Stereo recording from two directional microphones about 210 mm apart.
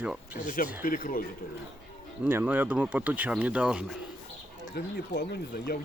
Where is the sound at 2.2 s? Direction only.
10° right (ahead or behind).